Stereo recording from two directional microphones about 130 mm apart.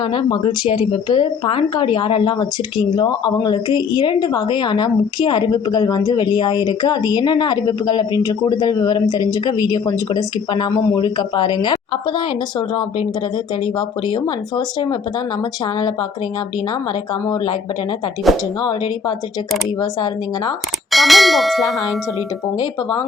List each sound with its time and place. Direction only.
0.0 s speech: 40° left (ahead or behind)
18.3 s clang: centre (ahead or behind)
20.9 s clang: centre (ahead or behind)